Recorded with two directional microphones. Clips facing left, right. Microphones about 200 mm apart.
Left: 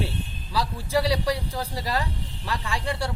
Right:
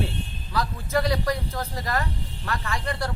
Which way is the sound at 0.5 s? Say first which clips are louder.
Left 1 dB; 10° left (ahead or behind).